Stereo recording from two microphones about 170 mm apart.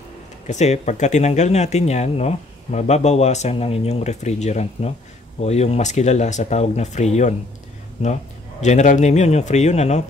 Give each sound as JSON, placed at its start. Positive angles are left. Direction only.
{"t": 0.5, "sound": "a man's voice", "side_deg": 40}